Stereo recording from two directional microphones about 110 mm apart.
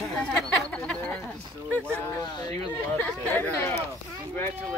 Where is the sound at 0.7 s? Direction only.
10° left (ahead or behind).